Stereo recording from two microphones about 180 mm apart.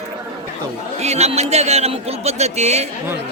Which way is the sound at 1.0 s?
35° right (ahead or behind).